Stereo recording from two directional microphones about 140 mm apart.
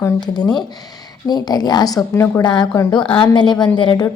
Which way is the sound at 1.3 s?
30° left (ahead or behind).